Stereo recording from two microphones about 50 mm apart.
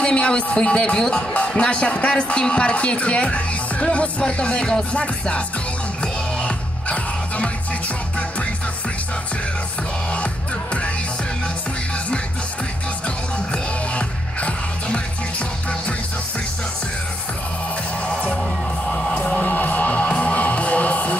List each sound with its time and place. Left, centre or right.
0.0 s speech: centre
6.4 s music: left
13.5 s music: left
18.9 s music: left